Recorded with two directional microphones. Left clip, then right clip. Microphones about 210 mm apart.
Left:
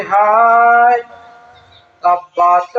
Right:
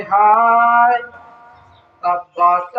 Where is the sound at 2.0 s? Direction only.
45° right (ahead or behind).